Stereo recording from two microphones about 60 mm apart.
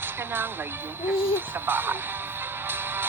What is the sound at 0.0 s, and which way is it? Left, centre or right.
A woman's voice, right.